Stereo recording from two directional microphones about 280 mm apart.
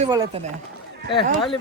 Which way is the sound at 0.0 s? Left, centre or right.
Centre.